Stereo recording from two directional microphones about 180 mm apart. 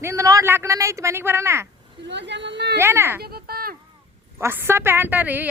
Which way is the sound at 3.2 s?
60° right (ahead or behind).